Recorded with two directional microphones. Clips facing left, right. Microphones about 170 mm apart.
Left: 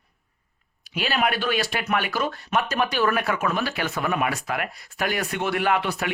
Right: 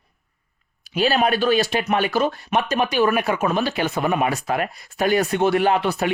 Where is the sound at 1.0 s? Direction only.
30° right (ahead or behind).